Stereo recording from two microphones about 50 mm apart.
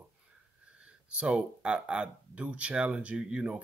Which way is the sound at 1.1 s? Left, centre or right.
Centre.